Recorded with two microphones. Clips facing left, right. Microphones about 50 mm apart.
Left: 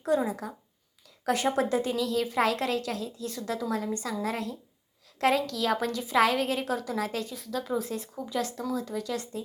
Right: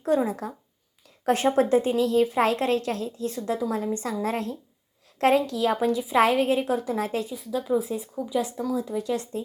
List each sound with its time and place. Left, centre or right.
0.3 s a woman's voice: right
4.2 s a woman's voice: right; by 6.1 s centre
6.1 s a woman's voice: right
7.3 s a woman's voice: centre; by 9.4 s right